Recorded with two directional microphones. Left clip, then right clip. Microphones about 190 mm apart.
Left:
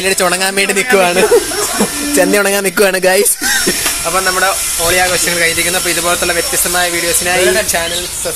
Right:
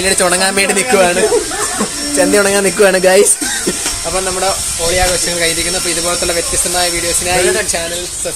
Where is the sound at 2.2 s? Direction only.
40° left (ahead or behind).